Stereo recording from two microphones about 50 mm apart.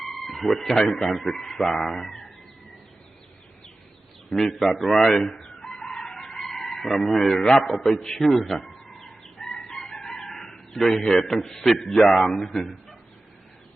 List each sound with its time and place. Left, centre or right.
0.0 s speech: centre
4.3 s speech: centre
5.4 s chicken: centre
7.5 s speech: centre
8.0 s chicken: centre
10.0 s a man's voice: centre